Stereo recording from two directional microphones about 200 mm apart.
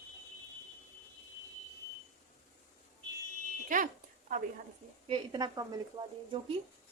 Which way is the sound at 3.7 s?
40° right (ahead or behind).